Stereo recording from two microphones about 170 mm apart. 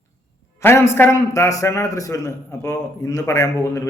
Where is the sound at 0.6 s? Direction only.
15° left (ahead or behind).